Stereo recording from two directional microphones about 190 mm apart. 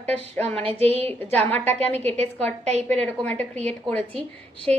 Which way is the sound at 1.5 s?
10° left (ahead or behind).